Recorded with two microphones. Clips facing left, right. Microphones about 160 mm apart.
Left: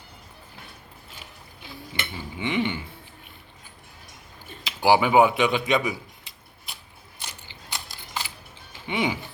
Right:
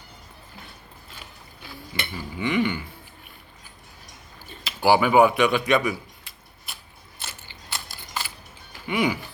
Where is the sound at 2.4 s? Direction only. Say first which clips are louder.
Right 2 dB; 25° left (ahead or behind).